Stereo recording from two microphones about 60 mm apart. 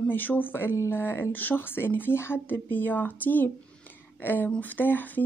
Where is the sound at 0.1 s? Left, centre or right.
Left.